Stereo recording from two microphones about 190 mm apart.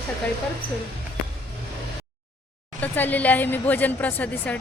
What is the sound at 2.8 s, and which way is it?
A woman's voice, 10° left (ahead or behind).